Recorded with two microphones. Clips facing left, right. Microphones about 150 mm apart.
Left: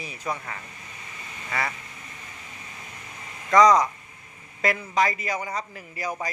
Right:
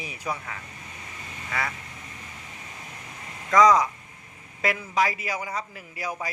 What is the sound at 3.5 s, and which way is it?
Speech, 5° right (ahead or behind).